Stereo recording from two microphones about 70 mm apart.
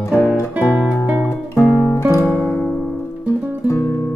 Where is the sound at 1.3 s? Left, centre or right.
Left.